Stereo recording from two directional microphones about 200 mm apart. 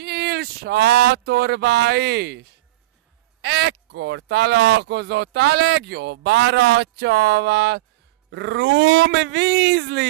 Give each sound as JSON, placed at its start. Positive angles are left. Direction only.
{"t": 0.0, "sound": "speech", "side_deg": -55}